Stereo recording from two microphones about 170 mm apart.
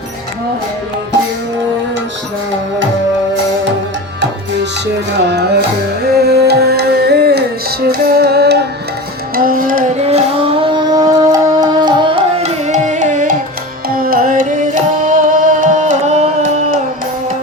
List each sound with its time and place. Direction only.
5.2 s music: 80° right
9.3 s music: 55° right (ahead or behind)
13.9 s music: 60° right (ahead or behind); by 16.3 s 40° right (ahead or behind)